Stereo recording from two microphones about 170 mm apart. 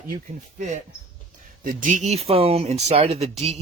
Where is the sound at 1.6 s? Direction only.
55° right (ahead or behind).